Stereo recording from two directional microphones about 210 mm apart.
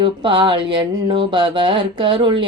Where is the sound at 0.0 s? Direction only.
25° right (ahead or behind).